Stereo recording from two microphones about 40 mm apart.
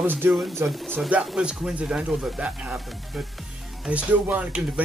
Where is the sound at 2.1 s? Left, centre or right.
Centre.